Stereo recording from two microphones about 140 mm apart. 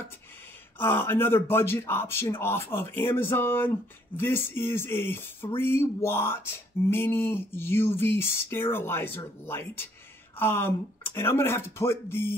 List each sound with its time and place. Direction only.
0.7 s speech: 15° left (ahead or behind)